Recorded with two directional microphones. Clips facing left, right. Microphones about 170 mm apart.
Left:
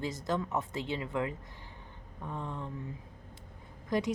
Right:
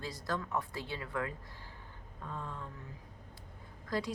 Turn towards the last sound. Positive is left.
turn(degrees=20)  # may be behind; listen again after turning